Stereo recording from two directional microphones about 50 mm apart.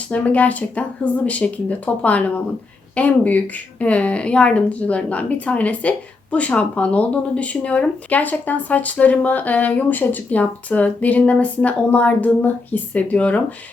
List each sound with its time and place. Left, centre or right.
0.1 s speech: left